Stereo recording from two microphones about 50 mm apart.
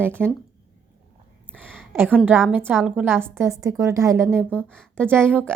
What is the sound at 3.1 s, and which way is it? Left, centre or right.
A woman's voice, right.